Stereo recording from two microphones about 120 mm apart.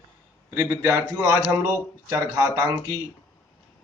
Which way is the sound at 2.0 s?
30° right (ahead or behind).